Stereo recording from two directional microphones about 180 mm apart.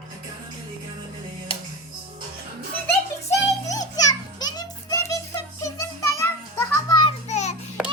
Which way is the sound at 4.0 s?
20° left (ahead or behind).